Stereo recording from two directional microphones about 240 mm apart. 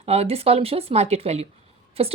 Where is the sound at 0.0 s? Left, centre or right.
Right.